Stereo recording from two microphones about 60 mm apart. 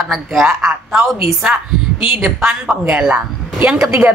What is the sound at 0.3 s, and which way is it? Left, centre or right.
A woman's voice, centre.